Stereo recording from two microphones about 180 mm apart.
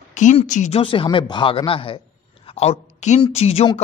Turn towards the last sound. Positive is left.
turn(degrees=35)  # may be behind; listen again after turning